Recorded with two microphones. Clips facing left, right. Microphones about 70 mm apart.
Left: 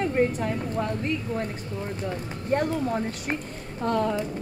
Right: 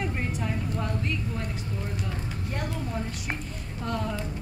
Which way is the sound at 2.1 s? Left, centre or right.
Left.